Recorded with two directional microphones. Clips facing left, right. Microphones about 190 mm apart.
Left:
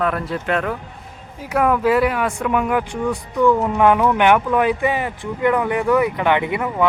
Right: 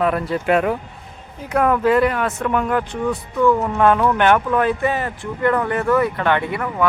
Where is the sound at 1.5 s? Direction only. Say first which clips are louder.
Right 1 dB; 5° left (ahead or behind).